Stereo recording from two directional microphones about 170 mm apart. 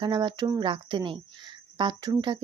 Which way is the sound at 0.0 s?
25° right (ahead or behind).